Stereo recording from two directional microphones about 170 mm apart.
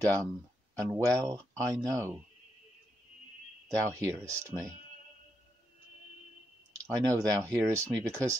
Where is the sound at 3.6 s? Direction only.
20° right (ahead or behind).